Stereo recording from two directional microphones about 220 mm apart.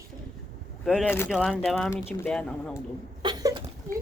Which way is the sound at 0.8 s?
5° left (ahead or behind).